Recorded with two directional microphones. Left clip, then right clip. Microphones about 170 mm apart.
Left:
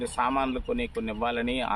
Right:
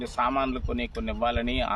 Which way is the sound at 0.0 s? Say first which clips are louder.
Even; 40° right (ahead or behind).